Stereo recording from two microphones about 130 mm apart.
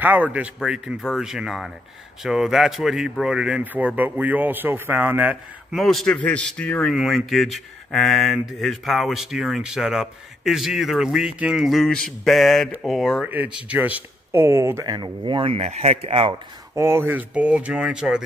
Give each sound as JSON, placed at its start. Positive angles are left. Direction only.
{"t": 0.0, "sound": "speech", "side_deg": -10}
{"t": 5.8, "sound": "a man's voice", "side_deg": 0}
{"t": 13.3, "sound": "speech", "side_deg": -10}
{"t": 16.7, "sound": "speech", "side_deg": -20}